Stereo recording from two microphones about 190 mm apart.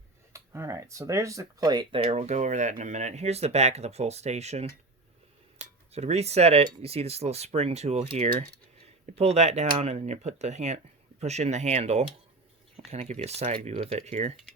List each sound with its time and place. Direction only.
0.3 s speech: 15° right (ahead or behind); by 14.3 s 35° right (ahead or behind)